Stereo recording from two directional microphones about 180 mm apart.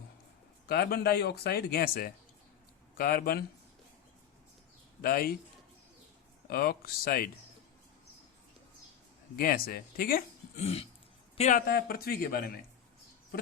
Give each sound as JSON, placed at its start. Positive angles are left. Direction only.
{"t": 0.7, "sound": "speech", "side_deg": 65}
{"t": 5.0, "sound": "speech", "side_deg": 55}
{"t": 6.5, "sound": "speech", "side_deg": 55}
{"t": 9.3, "sound": "speech", "side_deg": 55}
{"t": 11.3, "sound": "speech", "side_deg": 40}
{"t": 11.6, "sound": "speech", "side_deg": 55}